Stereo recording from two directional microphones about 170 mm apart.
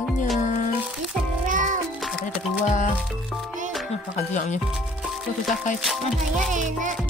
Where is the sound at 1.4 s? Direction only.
50° right (ahead or behind).